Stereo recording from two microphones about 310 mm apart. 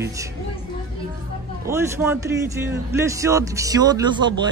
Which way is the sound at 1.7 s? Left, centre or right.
Centre.